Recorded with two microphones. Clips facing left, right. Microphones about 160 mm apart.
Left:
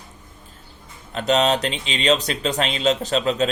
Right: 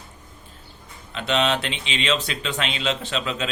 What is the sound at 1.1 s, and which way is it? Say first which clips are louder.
Speech: left 4 dB; 40° left (ahead or behind).